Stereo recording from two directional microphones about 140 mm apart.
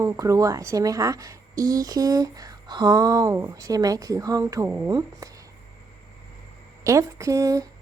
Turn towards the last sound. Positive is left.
turn(degrees=-25)  # may be behind; listen again after turning